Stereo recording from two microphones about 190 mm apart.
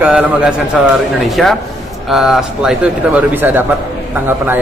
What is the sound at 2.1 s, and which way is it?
A man's voice, centre (ahead or behind).